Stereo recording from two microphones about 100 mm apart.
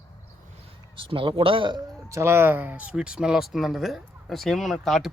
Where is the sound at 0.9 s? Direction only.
60° right (ahead or behind).